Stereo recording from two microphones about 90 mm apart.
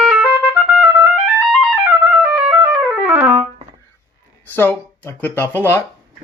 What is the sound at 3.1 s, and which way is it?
Trumpet, 20° right (ahead or behind).